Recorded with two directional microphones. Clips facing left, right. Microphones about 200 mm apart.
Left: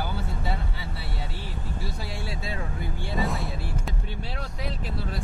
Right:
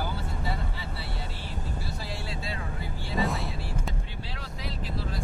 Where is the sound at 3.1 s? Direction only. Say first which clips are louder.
Even; centre (ahead or behind).